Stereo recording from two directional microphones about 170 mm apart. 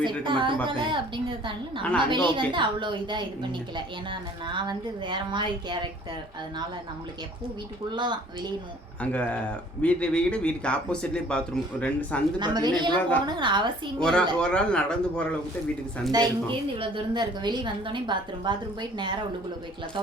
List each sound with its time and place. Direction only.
0.0 s a woman's voice: 30° right (ahead or behind)
7.9 s a woman's voice: 25° right (ahead or behind)
9.0 s speech: 5° left (ahead or behind)
12.4 s a woman's voice: 25° right (ahead or behind)
14.0 s speech: 5° left (ahead or behind)
16.1 s a woman's voice: 30° right (ahead or behind)